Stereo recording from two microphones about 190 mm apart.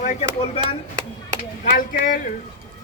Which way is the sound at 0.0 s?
40° left (ahead or behind).